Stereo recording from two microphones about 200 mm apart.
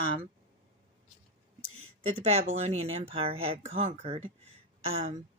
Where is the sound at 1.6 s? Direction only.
90° right.